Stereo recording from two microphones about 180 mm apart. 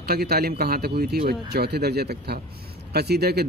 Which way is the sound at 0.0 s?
60° right (ahead or behind).